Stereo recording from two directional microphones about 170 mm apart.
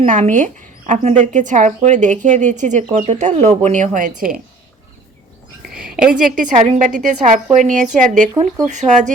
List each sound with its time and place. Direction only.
0.0 s speech: 50° right (ahead or behind)
6.0 s a woman's voice: 5° right (ahead or behind)
6.3 s speech: 50° right (ahead or behind)
8.3 s speech: 20° right (ahead or behind)
8.6 s speech: 45° right (ahead or behind)